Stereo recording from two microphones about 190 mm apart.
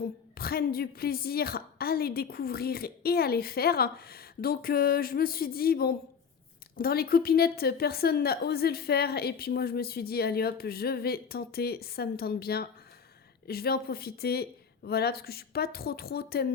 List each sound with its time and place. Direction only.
0.3 s a woman's voice: 50° left (ahead or behind)